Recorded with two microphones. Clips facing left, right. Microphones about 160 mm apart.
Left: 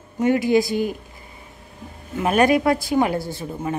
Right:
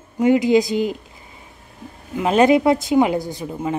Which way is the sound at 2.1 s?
20° right (ahead or behind).